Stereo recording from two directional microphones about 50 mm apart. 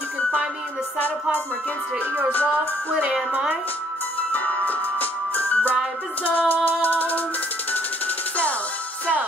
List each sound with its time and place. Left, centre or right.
2.9 s a woman's voice: right
4.3 s music: left